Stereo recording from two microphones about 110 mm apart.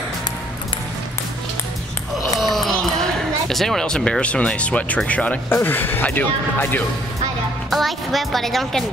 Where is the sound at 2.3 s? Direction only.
Centre (ahead or behind); by 6.8 s 15° left (ahead or behind).